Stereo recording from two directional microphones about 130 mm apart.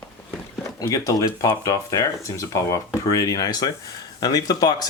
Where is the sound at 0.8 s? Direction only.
25° left (ahead or behind).